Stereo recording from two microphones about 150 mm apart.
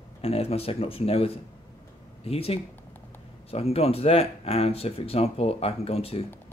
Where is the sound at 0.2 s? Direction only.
40° left (ahead or behind).